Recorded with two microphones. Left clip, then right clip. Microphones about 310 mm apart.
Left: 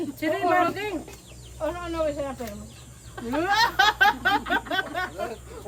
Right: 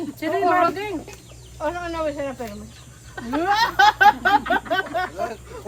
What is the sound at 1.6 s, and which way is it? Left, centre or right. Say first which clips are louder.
Speech: right 2 dB; right.